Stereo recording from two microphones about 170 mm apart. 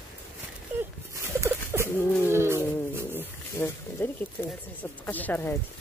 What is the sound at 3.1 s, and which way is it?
Wild animals, 15° left (ahead or behind).